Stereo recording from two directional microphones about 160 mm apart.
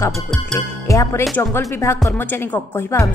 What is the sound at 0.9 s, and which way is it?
Speech, 20° left (ahead or behind).